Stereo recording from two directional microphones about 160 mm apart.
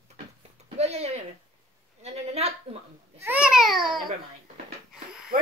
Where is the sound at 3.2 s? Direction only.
10° right (ahead or behind).